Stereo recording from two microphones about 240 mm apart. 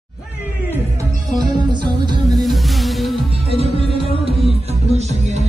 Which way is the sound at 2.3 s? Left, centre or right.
Centre.